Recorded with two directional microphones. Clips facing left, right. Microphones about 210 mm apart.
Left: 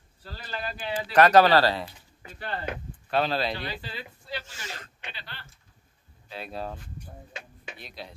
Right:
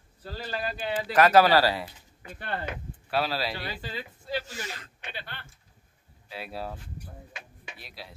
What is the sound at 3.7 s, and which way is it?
Speech, 45° right (ahead or behind).